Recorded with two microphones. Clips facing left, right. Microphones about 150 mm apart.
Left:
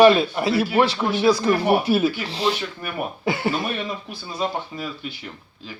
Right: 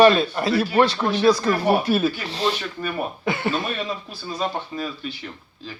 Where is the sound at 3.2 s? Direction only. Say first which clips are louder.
Left 2 dB; 30° left (ahead or behind).